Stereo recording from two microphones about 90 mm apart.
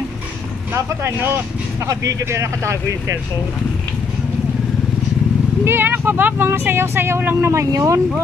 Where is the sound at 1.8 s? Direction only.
35° right (ahead or behind).